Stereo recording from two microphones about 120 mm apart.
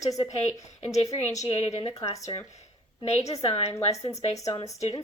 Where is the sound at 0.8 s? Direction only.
60° left (ahead or behind).